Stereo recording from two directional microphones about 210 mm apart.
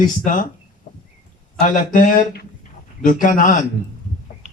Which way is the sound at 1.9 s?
40° left (ahead or behind).